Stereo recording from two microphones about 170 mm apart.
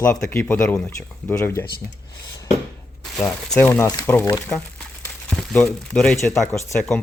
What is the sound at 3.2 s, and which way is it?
Speech, 5° left (ahead or behind).